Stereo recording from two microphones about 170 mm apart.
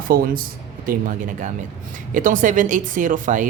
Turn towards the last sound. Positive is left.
turn(degrees=-50)  # may be behind; listen again after turning